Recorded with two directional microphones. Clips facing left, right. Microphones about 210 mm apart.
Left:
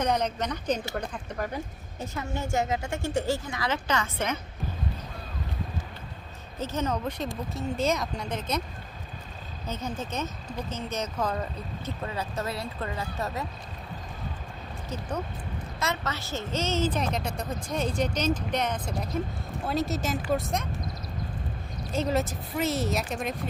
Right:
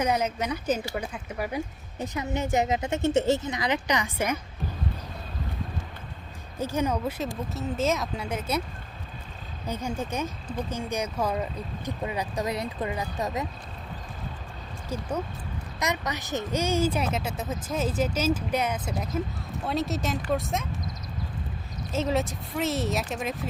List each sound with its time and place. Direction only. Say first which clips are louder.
0.0 s a woman's voice: right 1 dB; 5° right (ahead or behind)
6.6 s speech: right 2 dB; 10° right (ahead or behind)
9.6 s speech: right 3 dB; 10° right (ahead or behind)
15.8 s speech: right 2 dB; 15° right (ahead or behind); by 20.7 s centre (ahead or behind)
21.9 s speech: even; centre (ahead or behind)